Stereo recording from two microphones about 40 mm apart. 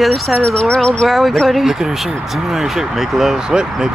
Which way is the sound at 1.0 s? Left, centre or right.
Centre.